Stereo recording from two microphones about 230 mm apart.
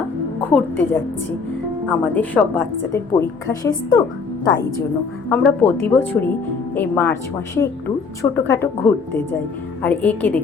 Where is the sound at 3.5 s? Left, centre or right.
Centre.